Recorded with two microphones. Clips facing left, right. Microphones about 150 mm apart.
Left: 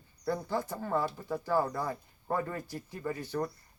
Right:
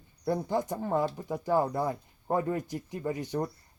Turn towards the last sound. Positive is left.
turn(degrees=-20)  # may be behind; listen again after turning